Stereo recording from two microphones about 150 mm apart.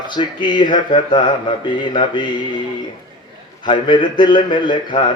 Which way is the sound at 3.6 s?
30° left (ahead or behind).